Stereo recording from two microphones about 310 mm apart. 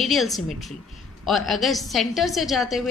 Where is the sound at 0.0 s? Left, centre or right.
Centre.